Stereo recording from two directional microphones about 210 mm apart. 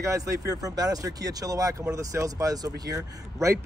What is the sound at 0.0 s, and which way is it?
Speech, 15° right (ahead or behind).